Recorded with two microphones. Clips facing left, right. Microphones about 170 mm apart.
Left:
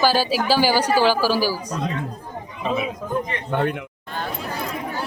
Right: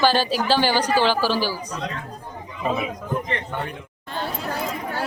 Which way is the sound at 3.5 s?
60° left (ahead or behind).